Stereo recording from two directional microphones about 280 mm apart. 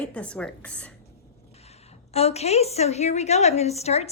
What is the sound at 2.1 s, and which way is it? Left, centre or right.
A woman's voice, left.